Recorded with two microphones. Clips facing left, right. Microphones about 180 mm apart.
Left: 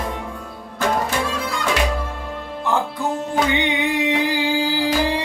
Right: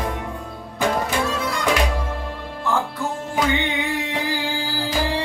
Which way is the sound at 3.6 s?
20° left (ahead or behind).